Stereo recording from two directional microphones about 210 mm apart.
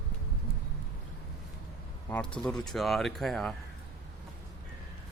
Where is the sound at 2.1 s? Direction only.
5° left (ahead or behind).